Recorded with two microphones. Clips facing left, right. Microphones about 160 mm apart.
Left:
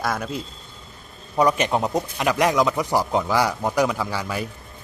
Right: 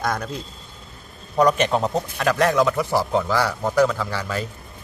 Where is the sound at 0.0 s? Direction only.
5° left (ahead or behind).